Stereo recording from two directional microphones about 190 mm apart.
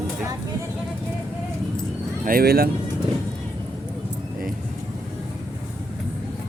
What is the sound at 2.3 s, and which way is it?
Speech, 50° right (ahead or behind).